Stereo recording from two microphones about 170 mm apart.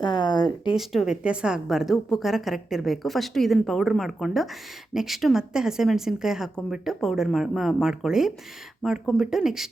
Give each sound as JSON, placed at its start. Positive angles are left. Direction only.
{"t": 0.0, "sound": "speech", "side_deg": 25}
{"t": 0.8, "sound": "a woman's voice", "side_deg": 0}